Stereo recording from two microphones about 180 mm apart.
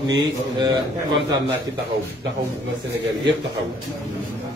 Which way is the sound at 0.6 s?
20° right (ahead or behind).